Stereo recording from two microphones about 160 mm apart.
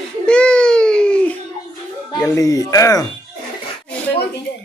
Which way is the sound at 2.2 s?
20° left (ahead or behind).